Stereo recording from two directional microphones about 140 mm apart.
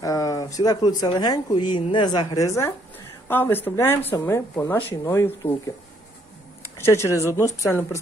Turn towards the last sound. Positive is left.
turn(degrees=20)  # may be behind; listen again after turning